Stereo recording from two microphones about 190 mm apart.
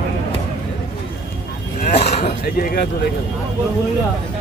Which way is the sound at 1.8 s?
35° left (ahead or behind).